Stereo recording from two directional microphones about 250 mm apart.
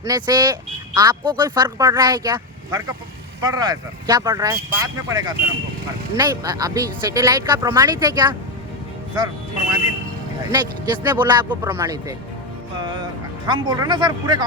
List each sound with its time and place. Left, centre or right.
0.0 s speech: centre
10.5 s speech: centre